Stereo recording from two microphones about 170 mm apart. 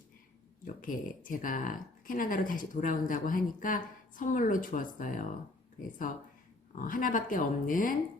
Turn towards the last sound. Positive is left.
turn(degrees=50)  # may be behind; listen again after turning